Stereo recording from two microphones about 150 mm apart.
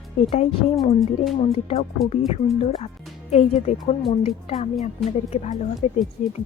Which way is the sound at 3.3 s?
50° left (ahead or behind).